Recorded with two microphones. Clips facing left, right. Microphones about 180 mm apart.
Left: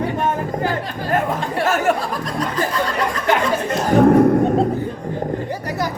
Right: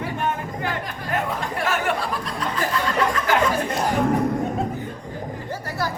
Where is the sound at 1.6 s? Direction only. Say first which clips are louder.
Left 6 dB; 45° left (ahead or behind).